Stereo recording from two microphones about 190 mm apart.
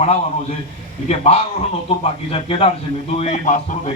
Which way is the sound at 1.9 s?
30° left (ahead or behind).